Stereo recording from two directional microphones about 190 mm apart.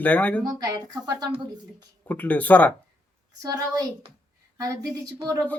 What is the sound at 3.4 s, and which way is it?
Speech, 20° right (ahead or behind).